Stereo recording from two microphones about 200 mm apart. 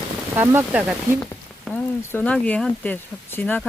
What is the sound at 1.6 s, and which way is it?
Speech, 10° left (ahead or behind).